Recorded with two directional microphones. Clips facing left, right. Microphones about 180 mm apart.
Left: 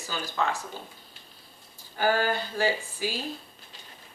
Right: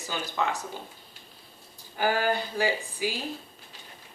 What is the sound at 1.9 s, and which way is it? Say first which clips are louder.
Speech: even; 15° right (ahead or behind).